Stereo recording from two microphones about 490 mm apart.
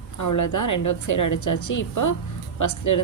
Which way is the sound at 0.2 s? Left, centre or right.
Left.